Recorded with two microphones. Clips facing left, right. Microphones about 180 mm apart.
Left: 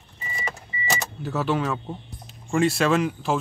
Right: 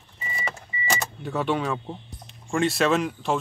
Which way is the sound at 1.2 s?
5° left (ahead or behind).